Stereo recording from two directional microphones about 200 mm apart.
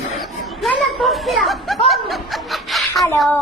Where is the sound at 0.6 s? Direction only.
Centre (ahead or behind).